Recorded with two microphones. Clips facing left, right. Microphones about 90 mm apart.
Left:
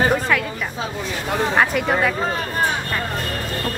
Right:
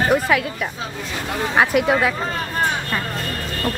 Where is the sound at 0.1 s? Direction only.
5° right (ahead or behind).